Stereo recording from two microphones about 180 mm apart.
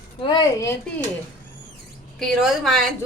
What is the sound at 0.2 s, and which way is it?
Speech, 25° left (ahead or behind).